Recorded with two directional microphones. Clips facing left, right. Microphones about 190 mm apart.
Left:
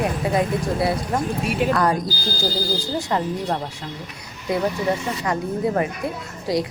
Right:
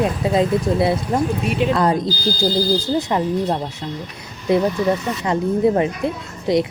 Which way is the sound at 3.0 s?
20° right (ahead or behind).